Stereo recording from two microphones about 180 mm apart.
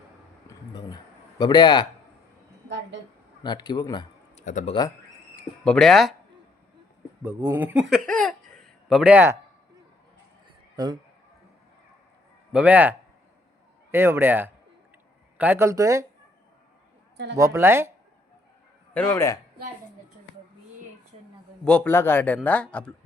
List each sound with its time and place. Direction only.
0.7 s a sound: 25° left (ahead or behind)
1.4 s speech: 25° left (ahead or behind)
2.6 s a sound: 75° right (ahead or behind)
3.4 s speech: 25° left (ahead or behind)
4.4 s speech: 40° left (ahead or behind)
5.6 s speech: centre (ahead or behind)
7.2 s speech: 15° right (ahead or behind)
12.5 s speech: 5° right (ahead or behind)
17.3 s speech: 15° right (ahead or behind)
18.9 s a man's voice: 15° left (ahead or behind)
21.6 s a man's voice: 5° left (ahead or behind)